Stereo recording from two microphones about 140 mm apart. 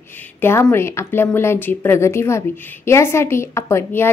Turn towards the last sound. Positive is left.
turn(degrees=20)  # may be behind; listen again after turning